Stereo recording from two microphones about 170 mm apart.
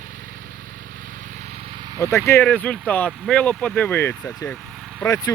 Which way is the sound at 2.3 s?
10° left (ahead or behind).